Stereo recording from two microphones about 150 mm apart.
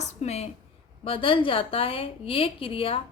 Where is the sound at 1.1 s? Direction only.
35° left (ahead or behind).